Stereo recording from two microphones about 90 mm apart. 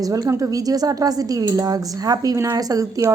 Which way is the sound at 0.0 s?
40° right (ahead or behind).